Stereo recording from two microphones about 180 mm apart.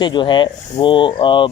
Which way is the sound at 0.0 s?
25° left (ahead or behind).